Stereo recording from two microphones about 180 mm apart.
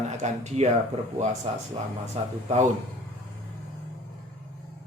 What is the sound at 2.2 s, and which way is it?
Speech, 35° right (ahead or behind).